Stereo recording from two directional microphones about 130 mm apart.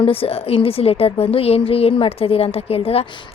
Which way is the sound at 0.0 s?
45° left (ahead or behind).